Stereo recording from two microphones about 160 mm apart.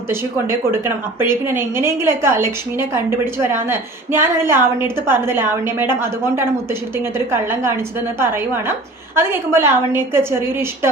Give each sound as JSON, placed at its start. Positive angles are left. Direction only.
{"t": 0.1, "sound": "a woman's voice", "side_deg": -15}